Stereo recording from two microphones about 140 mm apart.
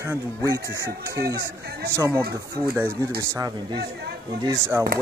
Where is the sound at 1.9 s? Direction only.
20° right (ahead or behind).